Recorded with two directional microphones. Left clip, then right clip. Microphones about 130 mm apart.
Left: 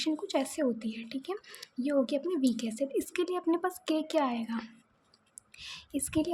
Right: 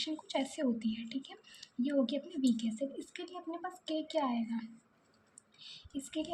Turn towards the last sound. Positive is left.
turn(degrees=40)  # may be behind; listen again after turning